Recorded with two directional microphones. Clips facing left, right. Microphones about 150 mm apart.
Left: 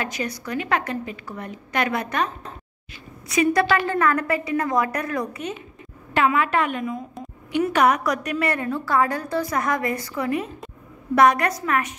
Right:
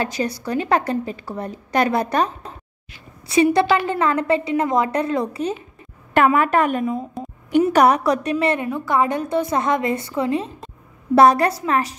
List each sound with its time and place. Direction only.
0.0 s a woman's voice: 30° right (ahead or behind)
3.5 s a woman's voice: 20° right (ahead or behind)
6.1 s a woman's voice: 50° right (ahead or behind); by 12.0 s 30° right (ahead or behind)